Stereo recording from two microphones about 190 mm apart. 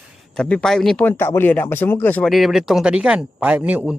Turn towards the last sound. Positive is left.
turn(degrees=-5)  # may be behind; listen again after turning